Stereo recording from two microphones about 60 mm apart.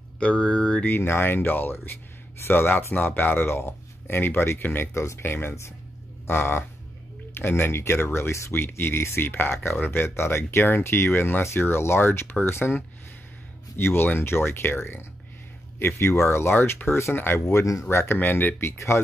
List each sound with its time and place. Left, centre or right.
0.2 s speech: left
0.8 s speech: left
4.9 s speech: left
5.2 s speech: left
16.1 s speech: left
17.5 s speech: left
17.8 s speech: left
18.7 s speech: left